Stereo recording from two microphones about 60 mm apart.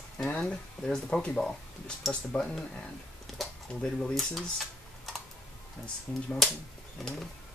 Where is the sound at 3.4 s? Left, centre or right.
Centre.